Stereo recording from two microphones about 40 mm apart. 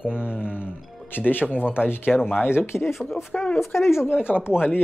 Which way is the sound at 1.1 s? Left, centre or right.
Left.